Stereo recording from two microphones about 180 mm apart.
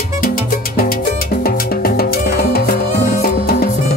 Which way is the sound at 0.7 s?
55° left (ahead or behind).